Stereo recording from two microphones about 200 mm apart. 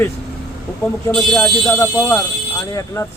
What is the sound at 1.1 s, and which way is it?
Speech, 5° left (ahead or behind).